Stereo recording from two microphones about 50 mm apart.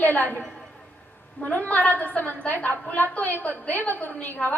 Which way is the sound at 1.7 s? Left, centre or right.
Left.